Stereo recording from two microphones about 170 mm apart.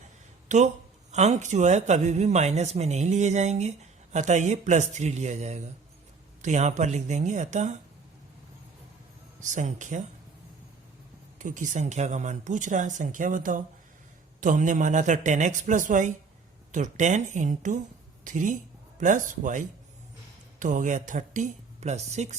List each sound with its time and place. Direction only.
0.4 s speech: 45° right (ahead or behind)
9.4 s speech: 45° right (ahead or behind)
11.3 s speech: 50° right (ahead or behind)